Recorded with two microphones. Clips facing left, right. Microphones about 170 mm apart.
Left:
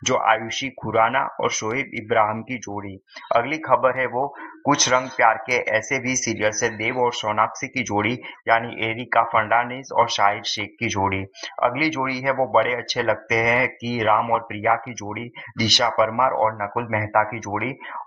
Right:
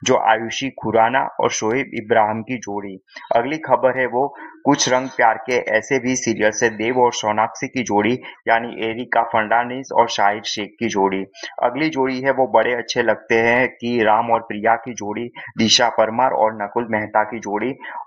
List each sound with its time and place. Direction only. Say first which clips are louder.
0.0 s speech: right 5 dB; 55° right (ahead or behind)
4.1 s speech: right 5 dB; 35° right (ahead or behind); by 7.1 s 55° right (ahead or behind)
7.1 s speech: right 5 dB; 80° right
7.3 s speech: right 4 dB; 55° right (ahead or behind)
10.9 s speech: right 6 dB; 45° right (ahead or behind)